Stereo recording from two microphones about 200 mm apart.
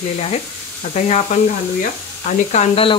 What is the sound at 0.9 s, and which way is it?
Speech, 35° left (ahead or behind).